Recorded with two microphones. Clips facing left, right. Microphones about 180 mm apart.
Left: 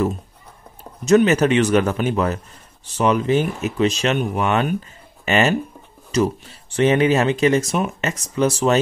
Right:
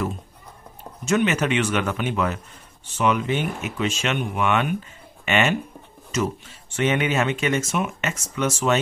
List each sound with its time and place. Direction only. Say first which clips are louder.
1.0 s speech: left 7 dB; 40° left (ahead or behind)